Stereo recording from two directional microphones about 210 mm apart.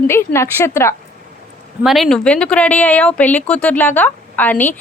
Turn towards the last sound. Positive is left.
turn(degrees=10)  # may be behind; listen again after turning